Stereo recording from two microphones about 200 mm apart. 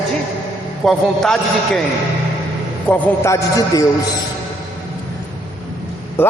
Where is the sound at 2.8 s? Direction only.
10° left (ahead or behind).